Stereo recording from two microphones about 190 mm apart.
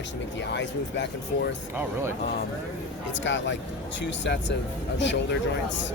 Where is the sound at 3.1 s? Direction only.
75° left (ahead or behind).